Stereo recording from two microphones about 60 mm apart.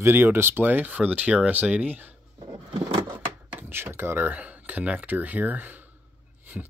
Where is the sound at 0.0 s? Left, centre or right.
Right.